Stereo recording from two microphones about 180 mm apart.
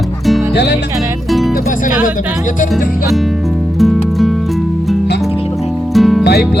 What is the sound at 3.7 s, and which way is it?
Music, centre (ahead or behind).